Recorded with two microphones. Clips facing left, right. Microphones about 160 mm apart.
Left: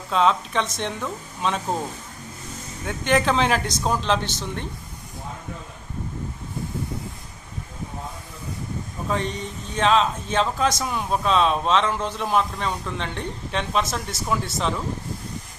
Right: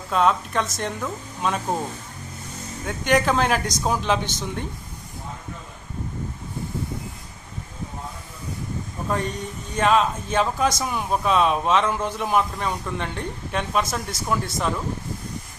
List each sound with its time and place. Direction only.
0.1 s speech: 5° right (ahead or behind)
2.8 s speech: centre (ahead or behind)
9.0 s speech: 5° right (ahead or behind)